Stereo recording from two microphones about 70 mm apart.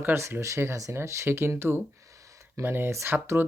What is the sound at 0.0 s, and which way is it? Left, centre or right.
Speech, right.